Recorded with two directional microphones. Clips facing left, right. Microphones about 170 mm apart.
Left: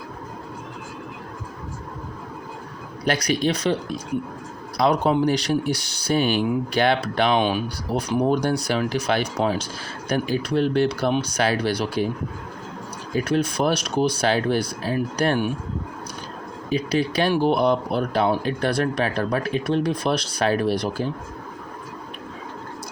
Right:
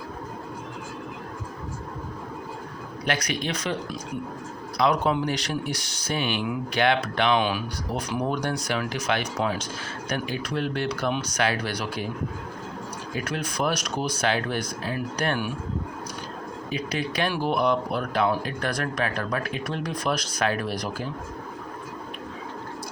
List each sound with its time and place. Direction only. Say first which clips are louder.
3.0 s speech: left 6 dB; 35° left (ahead or behind)
13.1 s speech: left 8 dB; 30° left (ahead or behind)
16.6 s speech: left 7 dB; 35° left (ahead or behind)